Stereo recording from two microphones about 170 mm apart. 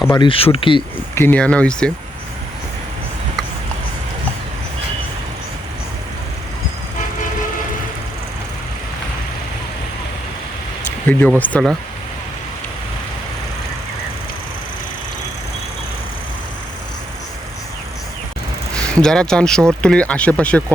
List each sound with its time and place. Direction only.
0.2 s speech: 30° left (ahead or behind)
1.1 s speech: 10° left (ahead or behind)
11.1 s speech: 10° left (ahead or behind)
18.9 s speech: 5° left (ahead or behind)